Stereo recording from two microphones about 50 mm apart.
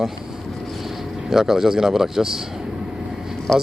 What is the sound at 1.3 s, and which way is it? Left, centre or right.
Speech, centre.